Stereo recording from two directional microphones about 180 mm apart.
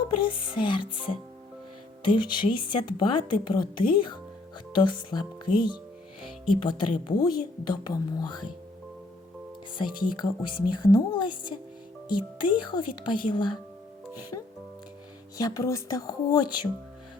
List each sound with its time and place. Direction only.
0.0 s speech: 25° left (ahead or behind)
2.0 s speech: 25° left (ahead or behind)
9.7 s speech: 25° left (ahead or behind)
15.4 s speech: 20° left (ahead or behind)